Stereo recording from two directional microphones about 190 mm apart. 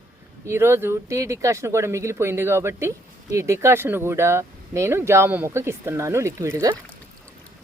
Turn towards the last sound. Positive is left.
turn(degrees=-15)  # may be behind; listen again after turning